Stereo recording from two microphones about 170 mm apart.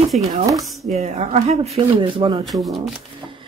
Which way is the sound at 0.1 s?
40° right (ahead or behind).